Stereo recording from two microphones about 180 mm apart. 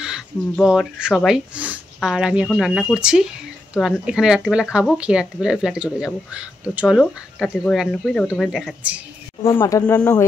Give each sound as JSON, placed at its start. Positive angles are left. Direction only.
{"t": 0.0, "sound": "speech", "side_deg": -5}
{"t": 9.4, "sound": "speech", "side_deg": 15}